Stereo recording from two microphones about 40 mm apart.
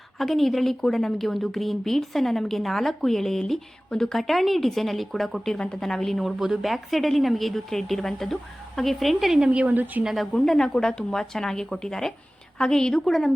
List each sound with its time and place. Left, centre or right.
0.2 s a woman's voice: centre
6.2 s a woman's voice: centre
9.5 s a woman's voice: right
9.7 s speech: right
10.2 s speech: centre
13.1 s a woman's voice: centre